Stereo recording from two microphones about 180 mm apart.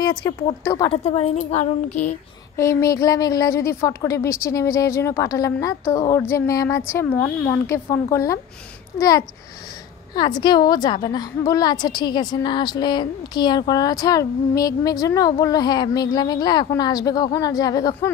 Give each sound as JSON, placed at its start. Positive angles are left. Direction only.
{"t": 0.0, "sound": "a woman's voice", "side_deg": 20}
{"t": 2.5, "sound": "a woman's voice", "side_deg": 15}